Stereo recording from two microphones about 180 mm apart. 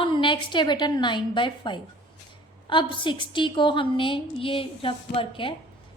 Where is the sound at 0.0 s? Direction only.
25° left (ahead or behind).